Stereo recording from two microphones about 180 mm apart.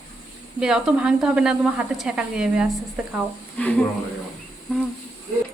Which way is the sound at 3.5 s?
5° left (ahead or behind).